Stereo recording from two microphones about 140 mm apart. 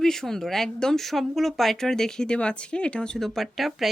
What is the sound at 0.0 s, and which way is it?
Speech, 5° left (ahead or behind).